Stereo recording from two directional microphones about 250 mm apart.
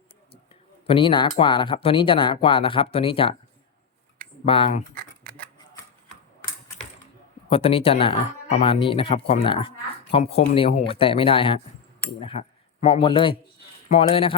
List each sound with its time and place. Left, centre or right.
0.9 s speech: centre
4.4 s speech: left
7.5 s speech: left